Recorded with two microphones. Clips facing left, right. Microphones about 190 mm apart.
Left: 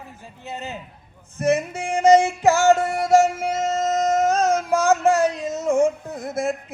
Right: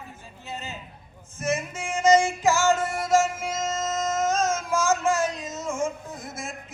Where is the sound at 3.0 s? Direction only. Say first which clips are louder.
Left 6 dB; 65° left (ahead or behind).